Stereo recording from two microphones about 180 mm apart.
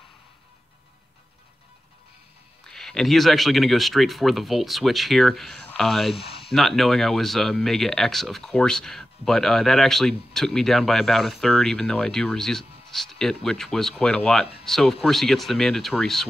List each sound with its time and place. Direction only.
2.7 s speech: centre (ahead or behind)
6.1 s a sound: 30° left (ahead or behind)
6.5 s speech: centre (ahead or behind)